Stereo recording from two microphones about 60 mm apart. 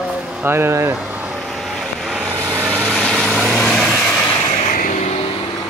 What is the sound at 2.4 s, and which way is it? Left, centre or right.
Vehicle, right.